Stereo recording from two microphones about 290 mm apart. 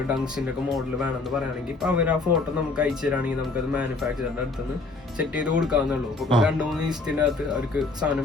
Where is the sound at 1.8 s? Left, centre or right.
Centre.